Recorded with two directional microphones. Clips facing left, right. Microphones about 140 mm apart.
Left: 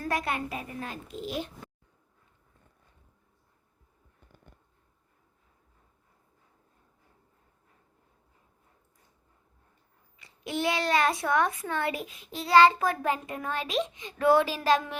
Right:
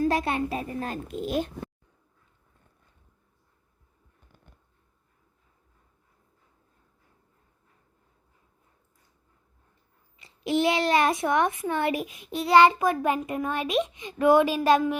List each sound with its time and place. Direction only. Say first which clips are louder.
0.1 s a child's voice: right 5 dB; 25° right (ahead or behind)
1.0 s speech: right 6 dB; 55° right (ahead or behind)
10.2 s a child's voice: right 7 dB; 25° right (ahead or behind)